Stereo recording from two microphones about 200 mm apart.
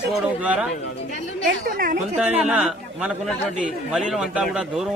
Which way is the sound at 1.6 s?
45° right (ahead or behind).